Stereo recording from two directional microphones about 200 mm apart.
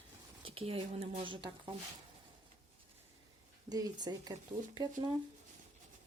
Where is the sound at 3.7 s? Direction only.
20° right (ahead or behind).